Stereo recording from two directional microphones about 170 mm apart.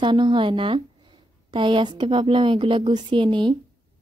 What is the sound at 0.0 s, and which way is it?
A woman's voice, 30° right (ahead or behind).